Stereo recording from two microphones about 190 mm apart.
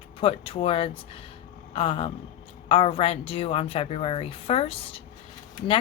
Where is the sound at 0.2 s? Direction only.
30° left (ahead or behind).